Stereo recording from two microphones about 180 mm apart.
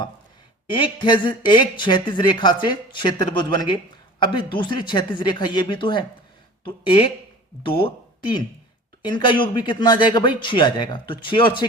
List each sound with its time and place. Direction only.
0.7 s speech: 25° left (ahead or behind)